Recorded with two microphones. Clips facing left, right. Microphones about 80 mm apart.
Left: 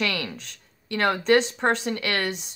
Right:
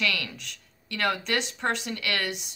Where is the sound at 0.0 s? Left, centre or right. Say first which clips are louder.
Left 2 dB; left.